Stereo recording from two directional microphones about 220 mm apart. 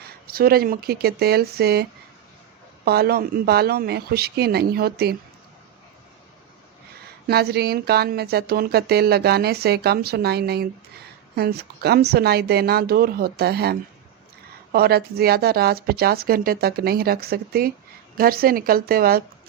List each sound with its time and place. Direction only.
0.0 s speech: 45° right (ahead or behind)
7.3 s speech: 45° right (ahead or behind)